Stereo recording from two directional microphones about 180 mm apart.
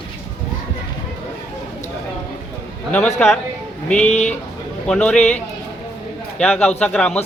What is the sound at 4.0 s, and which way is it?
Speech, 40° left (ahead or behind).